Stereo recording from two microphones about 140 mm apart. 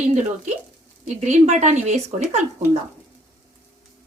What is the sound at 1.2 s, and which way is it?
Speech, 55° right (ahead or behind).